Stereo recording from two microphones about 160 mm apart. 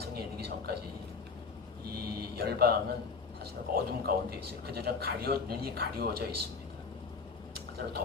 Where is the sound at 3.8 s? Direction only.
80° right.